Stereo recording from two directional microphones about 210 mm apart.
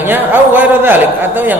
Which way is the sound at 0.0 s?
10° right (ahead or behind).